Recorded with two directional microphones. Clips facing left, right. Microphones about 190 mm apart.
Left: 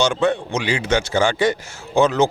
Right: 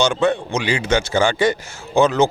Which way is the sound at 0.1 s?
25° right (ahead or behind).